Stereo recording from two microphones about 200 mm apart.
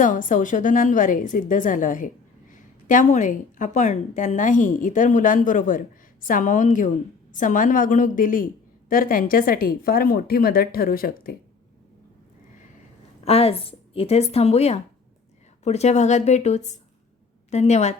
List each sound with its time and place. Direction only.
0.0 s a woman's voice: 40° left (ahead or behind)
13.2 s a woman's voice: 30° left (ahead or behind)